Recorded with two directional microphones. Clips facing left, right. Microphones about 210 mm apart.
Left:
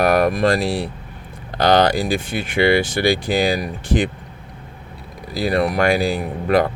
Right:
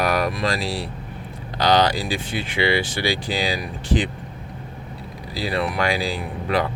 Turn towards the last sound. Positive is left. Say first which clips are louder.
# left 6 dB
turn(degrees=50)  # may be behind; listen again after turning